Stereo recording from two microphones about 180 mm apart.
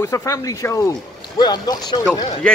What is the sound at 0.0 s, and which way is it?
Speech, 15° left (ahead or behind).